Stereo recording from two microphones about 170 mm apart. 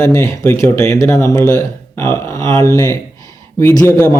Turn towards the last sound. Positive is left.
turn(degrees=15)  # may be behind; listen again after turning